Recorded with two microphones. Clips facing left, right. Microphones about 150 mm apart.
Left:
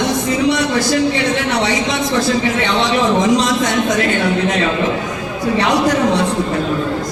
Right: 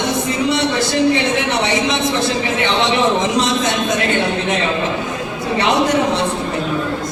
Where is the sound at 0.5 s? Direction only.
25° right (ahead or behind).